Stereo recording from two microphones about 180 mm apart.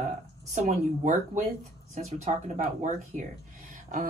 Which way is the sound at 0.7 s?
40° right (ahead or behind).